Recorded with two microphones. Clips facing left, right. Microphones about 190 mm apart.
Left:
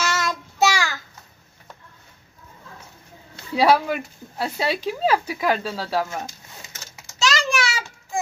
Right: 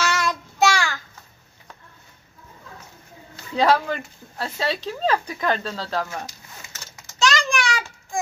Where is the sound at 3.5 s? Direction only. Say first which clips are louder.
Left 2 dB; 10° left (ahead or behind).